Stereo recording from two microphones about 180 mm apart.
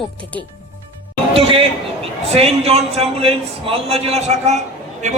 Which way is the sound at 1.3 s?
30° right (ahead or behind).